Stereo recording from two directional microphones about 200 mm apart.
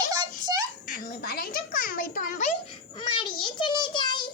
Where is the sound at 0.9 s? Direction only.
45° left (ahead or behind).